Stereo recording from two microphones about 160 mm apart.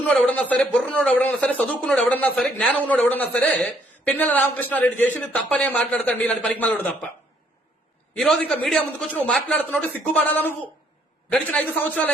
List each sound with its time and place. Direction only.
0.1 s a man's voice: 5° left (ahead or behind)
8.1 s a man's voice: 5° left (ahead or behind)